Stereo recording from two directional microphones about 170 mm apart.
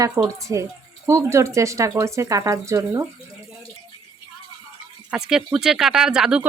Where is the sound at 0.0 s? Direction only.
20° right (ahead or behind).